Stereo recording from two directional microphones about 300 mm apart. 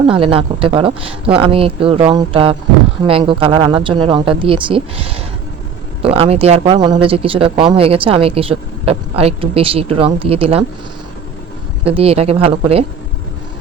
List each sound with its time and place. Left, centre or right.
0.1 s speech: centre
11.9 s speech: centre